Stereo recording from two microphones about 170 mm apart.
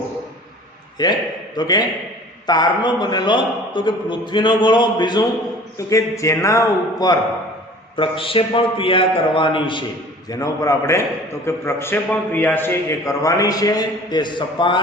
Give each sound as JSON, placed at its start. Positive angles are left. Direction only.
{"t": 1.0, "sound": "a man's voice", "side_deg": 25}